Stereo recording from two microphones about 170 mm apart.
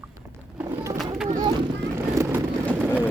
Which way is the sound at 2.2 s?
20° right (ahead or behind).